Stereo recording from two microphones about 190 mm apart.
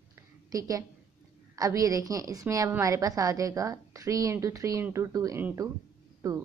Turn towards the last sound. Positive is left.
turn(degrees=-15)  # may be behind; listen again after turning